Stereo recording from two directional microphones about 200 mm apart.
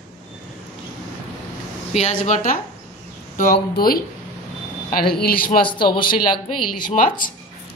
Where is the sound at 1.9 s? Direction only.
35° left (ahead or behind).